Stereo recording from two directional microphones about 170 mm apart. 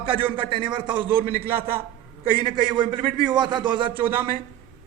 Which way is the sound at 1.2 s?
60° right (ahead or behind).